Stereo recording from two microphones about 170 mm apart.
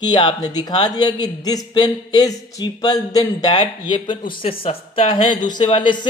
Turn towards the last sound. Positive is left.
turn(degrees=30)  # may be behind; listen again after turning